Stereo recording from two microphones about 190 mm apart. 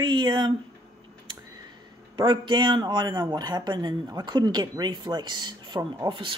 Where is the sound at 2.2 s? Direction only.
25° right (ahead or behind).